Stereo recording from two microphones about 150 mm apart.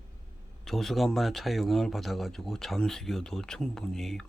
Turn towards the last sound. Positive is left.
turn(degrees=0)  # may be behind; listen again after turning